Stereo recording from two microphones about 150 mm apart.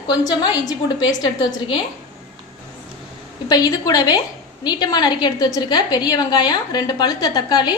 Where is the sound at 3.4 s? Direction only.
25° left (ahead or behind).